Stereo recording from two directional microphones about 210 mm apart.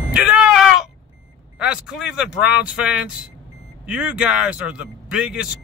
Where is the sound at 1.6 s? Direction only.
5° right (ahead or behind).